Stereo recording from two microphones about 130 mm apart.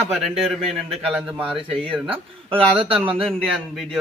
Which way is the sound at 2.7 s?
45° right (ahead or behind).